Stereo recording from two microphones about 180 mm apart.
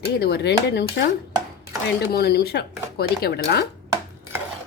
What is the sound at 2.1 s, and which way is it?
Speech, 60° left (ahead or behind).